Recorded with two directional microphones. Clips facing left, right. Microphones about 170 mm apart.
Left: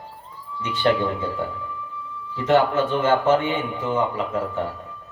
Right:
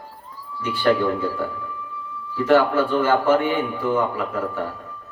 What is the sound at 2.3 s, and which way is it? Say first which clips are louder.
Speech: right 2 dB; 20° left (ahead or behind).